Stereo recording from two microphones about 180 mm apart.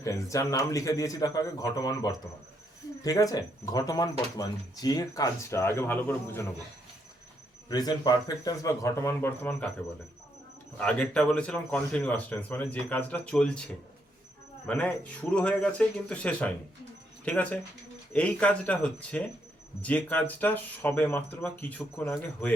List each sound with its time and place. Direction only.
0.0 s a man's voice: 15° left (ahead or behind)
7.7 s a man's voice: 20° left (ahead or behind)
10.8 s a man's voice: 5° left (ahead or behind)